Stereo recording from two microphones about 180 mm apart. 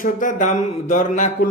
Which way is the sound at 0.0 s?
45° left (ahead or behind).